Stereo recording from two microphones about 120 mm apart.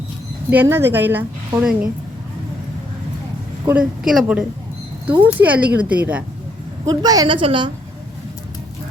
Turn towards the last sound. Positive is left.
turn(degrees=-45)  # may be behind; listen again after turning